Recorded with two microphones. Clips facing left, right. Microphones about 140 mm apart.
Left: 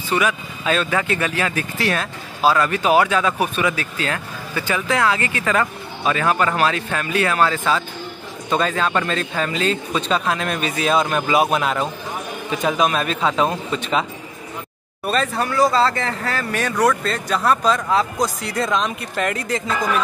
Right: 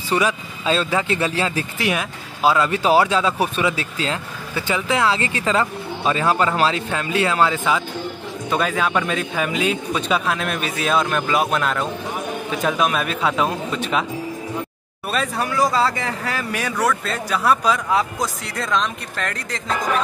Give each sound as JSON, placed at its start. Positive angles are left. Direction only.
{"t": 0.2, "sound": "speech", "side_deg": -30}
{"t": 1.8, "sound": "speech", "side_deg": -15}
{"t": 2.8, "sound": "a man's voice", "side_deg": -30}
{"t": 15.0, "sound": "speech", "side_deg": -5}